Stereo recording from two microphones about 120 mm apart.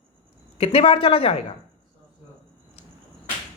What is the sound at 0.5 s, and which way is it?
Speech, 55° left (ahead or behind).